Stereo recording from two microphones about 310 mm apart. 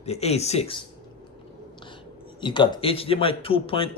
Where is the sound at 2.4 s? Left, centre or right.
Centre.